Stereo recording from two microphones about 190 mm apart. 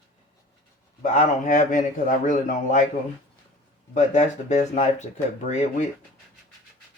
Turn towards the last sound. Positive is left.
turn(degrees=35)  # may be behind; listen again after turning